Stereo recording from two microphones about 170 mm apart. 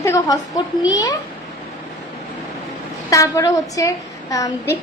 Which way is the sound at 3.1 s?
20° left (ahead or behind).